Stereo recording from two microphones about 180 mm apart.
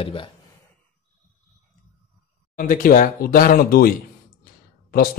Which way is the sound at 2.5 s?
50° left (ahead or behind).